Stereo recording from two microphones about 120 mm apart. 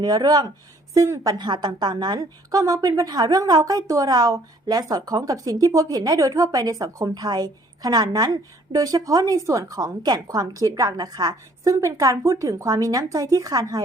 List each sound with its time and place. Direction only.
0.0 s a woman's voice: 35° right (ahead or behind)